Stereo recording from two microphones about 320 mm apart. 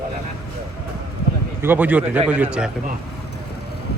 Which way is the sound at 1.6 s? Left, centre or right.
Centre.